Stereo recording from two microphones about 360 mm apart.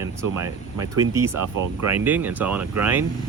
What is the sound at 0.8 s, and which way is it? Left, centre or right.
Speech, centre.